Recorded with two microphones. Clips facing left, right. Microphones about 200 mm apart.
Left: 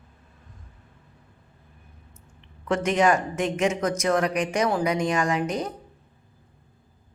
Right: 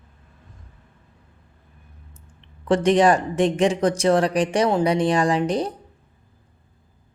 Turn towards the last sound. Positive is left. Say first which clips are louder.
# right 5 dB
turn(degrees=-30)  # may be behind; listen again after turning